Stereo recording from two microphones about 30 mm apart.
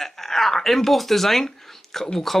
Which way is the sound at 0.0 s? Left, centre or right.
Centre.